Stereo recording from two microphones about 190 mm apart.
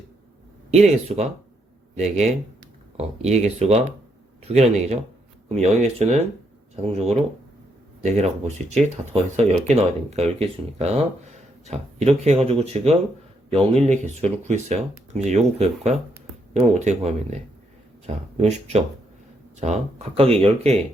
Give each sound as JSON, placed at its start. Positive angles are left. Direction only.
{"t": 0.7, "sound": "speech", "side_deg": -35}